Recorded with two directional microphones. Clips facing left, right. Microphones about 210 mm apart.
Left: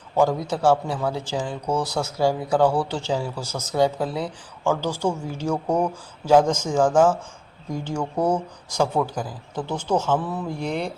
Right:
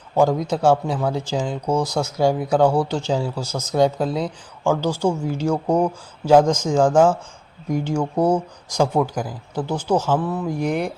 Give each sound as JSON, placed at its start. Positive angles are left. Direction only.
{"t": 0.2, "sound": "speech", "side_deg": -15}
{"t": 10.4, "sound": "speech", "side_deg": -10}